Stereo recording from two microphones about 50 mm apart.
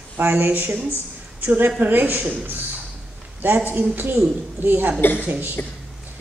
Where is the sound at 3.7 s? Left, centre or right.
Right.